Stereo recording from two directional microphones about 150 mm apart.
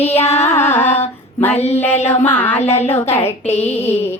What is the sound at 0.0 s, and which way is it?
Music, 45° left (ahead or behind).